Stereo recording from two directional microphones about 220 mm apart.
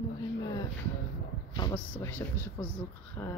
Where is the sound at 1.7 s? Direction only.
10° left (ahead or behind).